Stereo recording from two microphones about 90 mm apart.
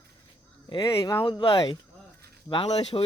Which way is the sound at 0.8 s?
35° left (ahead or behind).